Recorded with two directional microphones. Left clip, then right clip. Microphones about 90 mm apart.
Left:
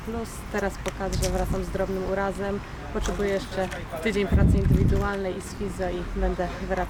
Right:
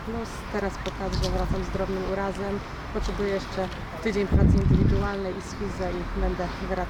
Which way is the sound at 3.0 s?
5° left (ahead or behind).